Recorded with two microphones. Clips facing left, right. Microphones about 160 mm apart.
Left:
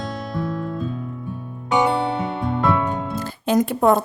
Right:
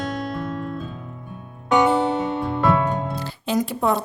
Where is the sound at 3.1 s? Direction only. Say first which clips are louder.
Left 4 dB; 50° left (ahead or behind).